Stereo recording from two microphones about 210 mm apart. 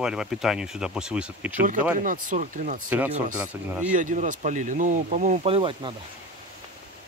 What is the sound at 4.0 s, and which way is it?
Speech, 35° right (ahead or behind).